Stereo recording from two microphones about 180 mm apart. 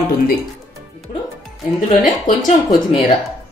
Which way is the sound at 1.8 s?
45° left (ahead or behind).